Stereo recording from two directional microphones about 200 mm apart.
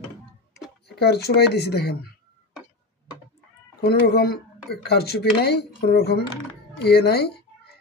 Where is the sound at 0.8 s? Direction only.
55° left (ahead or behind).